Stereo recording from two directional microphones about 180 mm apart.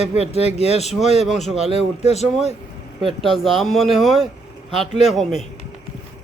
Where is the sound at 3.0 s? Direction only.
Centre (ahead or behind).